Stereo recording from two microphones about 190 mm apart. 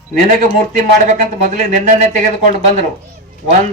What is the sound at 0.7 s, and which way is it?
Speech, 45° right (ahead or behind).